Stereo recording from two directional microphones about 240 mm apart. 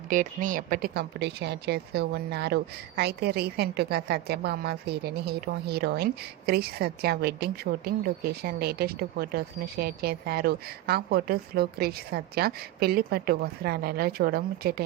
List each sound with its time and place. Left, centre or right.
0.1 s a woman's voice: right